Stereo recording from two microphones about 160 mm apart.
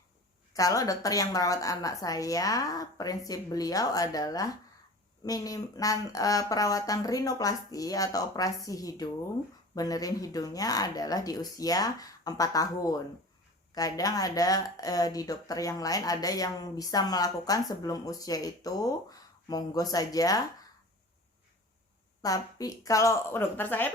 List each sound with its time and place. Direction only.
0.5 s speech: 20° left (ahead or behind)
22.2 s speech: 20° left (ahead or behind)